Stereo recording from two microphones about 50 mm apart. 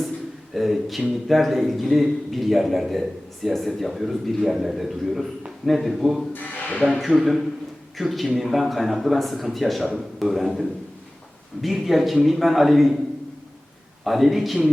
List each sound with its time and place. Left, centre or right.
0.5 s a man's voice: centre
6.3 s a sound: left
7.2 s a man's voice: centre
14.0 s a man's voice: centre